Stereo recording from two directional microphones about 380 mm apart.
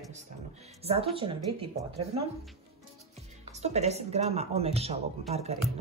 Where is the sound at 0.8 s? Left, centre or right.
Centre.